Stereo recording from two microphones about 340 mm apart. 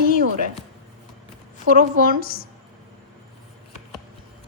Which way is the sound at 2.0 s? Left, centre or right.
Left.